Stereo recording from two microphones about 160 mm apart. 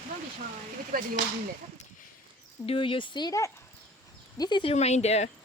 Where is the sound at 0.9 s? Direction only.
65° right (ahead or behind).